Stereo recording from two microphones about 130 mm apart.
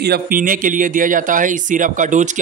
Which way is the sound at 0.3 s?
90° right.